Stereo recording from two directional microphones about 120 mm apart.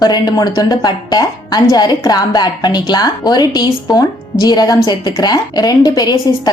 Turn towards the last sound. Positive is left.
turn(degrees=35)  # may be behind; listen again after turning